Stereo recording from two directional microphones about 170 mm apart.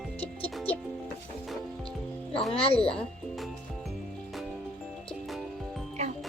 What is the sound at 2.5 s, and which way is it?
Speech, 35° left (ahead or behind).